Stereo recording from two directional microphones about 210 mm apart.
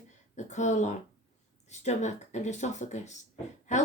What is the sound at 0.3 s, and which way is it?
Speech, 35° left (ahead or behind).